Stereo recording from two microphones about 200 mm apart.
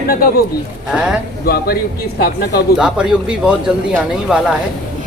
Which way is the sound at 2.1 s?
50° left (ahead or behind).